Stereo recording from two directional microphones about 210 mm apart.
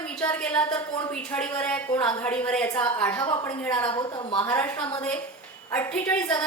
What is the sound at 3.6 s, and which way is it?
Speech, 5° left (ahead or behind).